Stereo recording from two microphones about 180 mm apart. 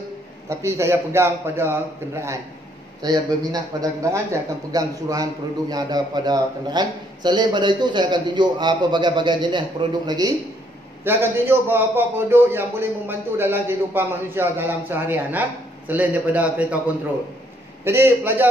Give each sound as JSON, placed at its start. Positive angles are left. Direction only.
{"t": 0.5, "sound": "a man's voice", "side_deg": -15}
{"t": 11.1, "sound": "a man's voice", "side_deg": -10}